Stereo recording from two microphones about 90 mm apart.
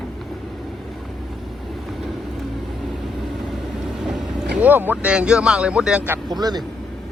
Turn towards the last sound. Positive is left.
turn(degrees=-50)  # may be behind; listen again after turning